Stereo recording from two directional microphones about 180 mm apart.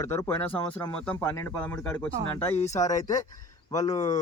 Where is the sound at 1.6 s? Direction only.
10° left (ahead or behind).